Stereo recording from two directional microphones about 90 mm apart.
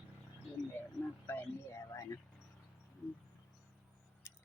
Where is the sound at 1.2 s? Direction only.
30° left (ahead or behind).